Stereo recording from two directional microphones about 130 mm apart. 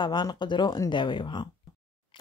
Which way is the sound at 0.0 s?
35° left (ahead or behind).